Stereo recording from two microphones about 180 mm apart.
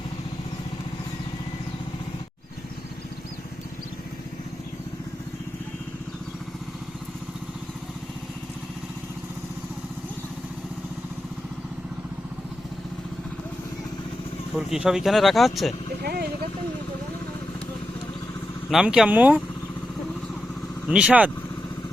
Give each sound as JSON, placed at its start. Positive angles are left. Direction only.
{"t": 14.5, "sound": "speech", "side_deg": -5}
{"t": 18.7, "sound": "speech", "side_deg": -5}
{"t": 20.8, "sound": "speech", "side_deg": -5}